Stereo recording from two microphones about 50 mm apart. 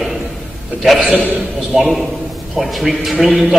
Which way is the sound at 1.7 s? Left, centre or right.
Centre.